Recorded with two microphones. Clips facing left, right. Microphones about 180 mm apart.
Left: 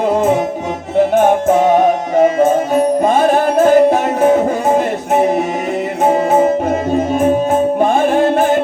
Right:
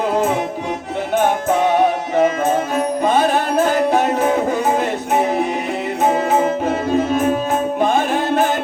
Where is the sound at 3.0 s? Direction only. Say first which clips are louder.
Left 4 dB; 50° left (ahead or behind).